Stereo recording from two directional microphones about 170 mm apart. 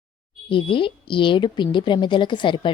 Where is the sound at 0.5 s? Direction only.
30° left (ahead or behind).